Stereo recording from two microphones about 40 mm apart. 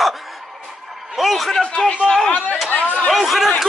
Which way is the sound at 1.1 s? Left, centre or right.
Centre.